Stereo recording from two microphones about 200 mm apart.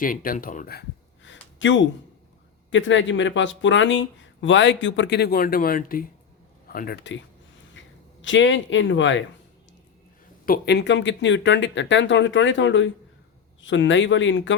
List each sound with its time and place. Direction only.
0.0 s speech: 45° left (ahead or behind); by 7.2 s 60° left (ahead or behind)
7.8 s a sound: 70° left (ahead or behind)
8.2 s speech: 70° left (ahead or behind)
10.4 s speech: 50° left (ahead or behind); by 14.5 s 70° left (ahead or behind)